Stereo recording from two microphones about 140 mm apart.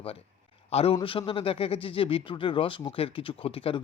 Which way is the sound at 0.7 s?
45° left (ahead or behind).